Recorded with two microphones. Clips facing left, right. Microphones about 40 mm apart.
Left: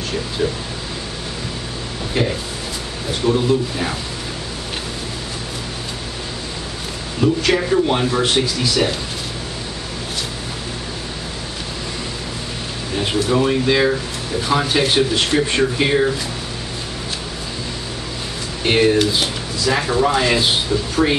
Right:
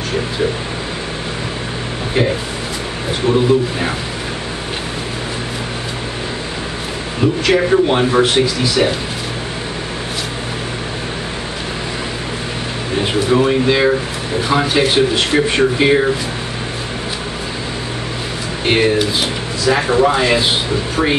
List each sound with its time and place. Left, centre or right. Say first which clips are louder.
2.2 s a man's voice: right 4 dB; centre
7.2 s speech: right 2 dB; centre
13.0 s speech: right 3 dB; centre
18.6 s speech: even; centre